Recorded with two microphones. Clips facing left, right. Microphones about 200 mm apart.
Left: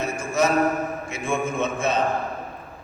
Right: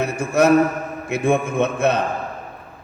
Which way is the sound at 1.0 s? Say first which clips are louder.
Right 7 dB; 60° right (ahead or behind).